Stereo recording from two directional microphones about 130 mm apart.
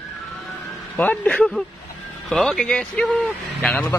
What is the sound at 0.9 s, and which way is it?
A man's voice, 10° left (ahead or behind).